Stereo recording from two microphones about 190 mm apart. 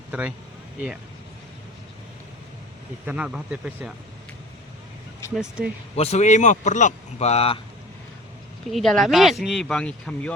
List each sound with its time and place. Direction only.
0.1 s speech: 5° right (ahead or behind)
3.1 s speech: 5° right (ahead or behind)
5.3 s speech: 5° right (ahead or behind)
6.0 s speech: 35° left (ahead or behind)
8.7 s speech: centre (ahead or behind)